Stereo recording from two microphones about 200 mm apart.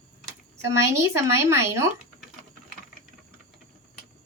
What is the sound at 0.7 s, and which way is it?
A woman's voice, 15° right (ahead or behind).